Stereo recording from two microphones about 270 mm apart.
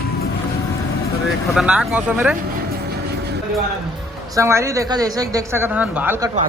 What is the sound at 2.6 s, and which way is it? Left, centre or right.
Vehicle, right.